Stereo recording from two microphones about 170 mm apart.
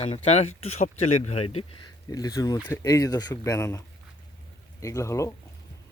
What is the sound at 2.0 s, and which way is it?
Speech, 20° left (ahead or behind).